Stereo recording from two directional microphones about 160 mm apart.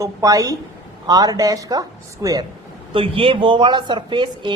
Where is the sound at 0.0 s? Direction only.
20° right (ahead or behind).